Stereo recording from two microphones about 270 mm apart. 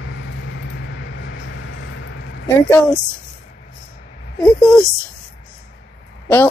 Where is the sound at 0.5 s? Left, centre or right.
Left.